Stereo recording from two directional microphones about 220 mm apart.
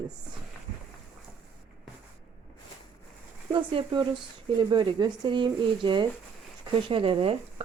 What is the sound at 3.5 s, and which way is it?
Speech, 20° right (ahead or behind).